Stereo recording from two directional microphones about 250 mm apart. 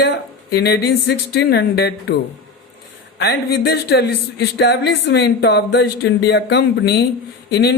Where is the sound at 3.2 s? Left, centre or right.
Left.